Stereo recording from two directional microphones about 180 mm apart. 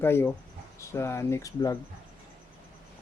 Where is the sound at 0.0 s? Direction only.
15° left (ahead or behind).